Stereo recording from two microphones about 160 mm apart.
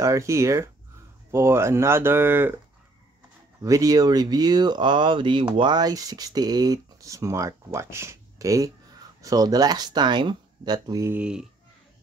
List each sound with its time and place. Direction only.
0.0 s speech: 20° right (ahead or behind)
3.6 s speech: 20° right (ahead or behind)
11.1 s speech: 5° right (ahead or behind)